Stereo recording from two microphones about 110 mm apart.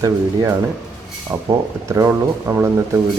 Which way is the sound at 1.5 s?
30° right (ahead or behind).